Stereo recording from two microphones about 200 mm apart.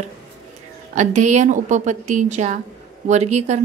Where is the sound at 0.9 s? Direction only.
35° right (ahead or behind).